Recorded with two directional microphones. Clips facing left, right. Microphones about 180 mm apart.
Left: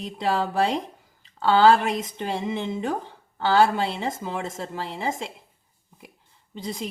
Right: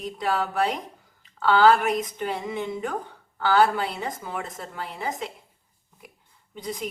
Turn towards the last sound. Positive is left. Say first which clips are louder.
# left 1 dB
turn(degrees=25)  # may be behind; listen again after turning